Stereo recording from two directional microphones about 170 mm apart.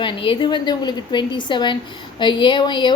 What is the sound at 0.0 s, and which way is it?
A woman's voice, 30° left (ahead or behind).